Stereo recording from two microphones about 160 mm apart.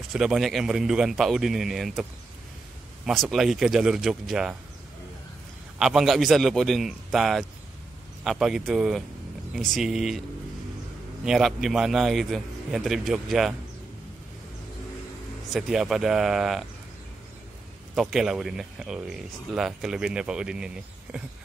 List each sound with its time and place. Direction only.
0.1 s speech: 5° right (ahead or behind)
3.1 s speech: centre (ahead or behind)
5.8 s speech: centre (ahead or behind)
11.2 s speech: centre (ahead or behind)
15.5 s speech: centre (ahead or behind)
17.9 s speech: 5° right (ahead or behind)